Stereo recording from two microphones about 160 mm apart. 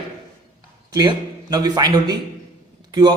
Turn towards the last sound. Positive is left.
turn(degrees=-25)  # may be behind; listen again after turning